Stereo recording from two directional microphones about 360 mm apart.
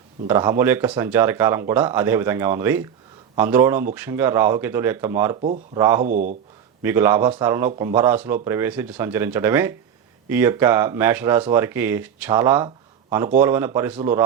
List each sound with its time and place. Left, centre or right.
0.3 s speech: centre
5.4 s speech: centre
5.8 s speech: centre
6.1 s speech: right
6.8 s speech: centre